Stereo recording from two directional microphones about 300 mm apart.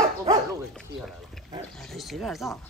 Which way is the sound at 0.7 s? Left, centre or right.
Centre.